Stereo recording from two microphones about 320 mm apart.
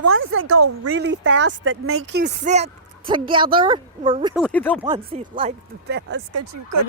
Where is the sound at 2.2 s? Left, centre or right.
Right.